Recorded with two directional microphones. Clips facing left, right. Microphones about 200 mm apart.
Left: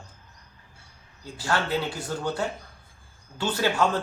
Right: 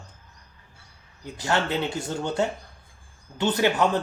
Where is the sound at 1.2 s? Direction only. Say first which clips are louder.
Right 2 dB; 20° right (ahead or behind).